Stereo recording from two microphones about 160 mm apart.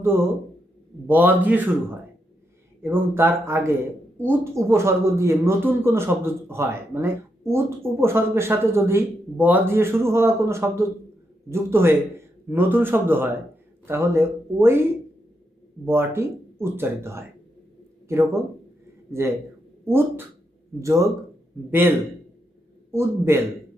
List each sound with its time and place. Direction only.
0.0 s speech: 15° right (ahead or behind)
15.9 s speech: 15° right (ahead or behind)